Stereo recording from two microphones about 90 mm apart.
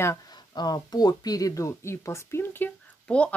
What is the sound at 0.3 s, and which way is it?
Speech, 50° left (ahead or behind).